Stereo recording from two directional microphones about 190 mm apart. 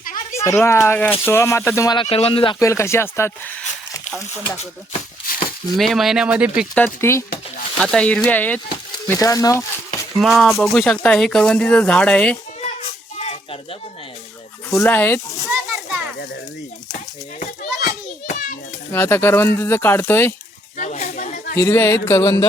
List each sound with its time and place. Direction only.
0.0 s a sound: 45° left (ahead or behind)
0.3 s speech: 15° left (ahead or behind)
2.6 s speech: 15° left (ahead or behind)
5.2 s a sound: 50° left (ahead or behind)
5.7 s speech: centre (ahead or behind)
6.7 s speech: 10° left (ahead or behind)
10.2 s speech: centre (ahead or behind)
13.1 s a sound: 35° left (ahead or behind)
14.7 s speech: 10° left (ahead or behind)
17.8 s children playing: 45° left (ahead or behind)
18.9 s speech: 10° left (ahead or behind)
20.7 s chatter: 40° left (ahead or behind)
21.6 s speech: 15° left (ahead or behind)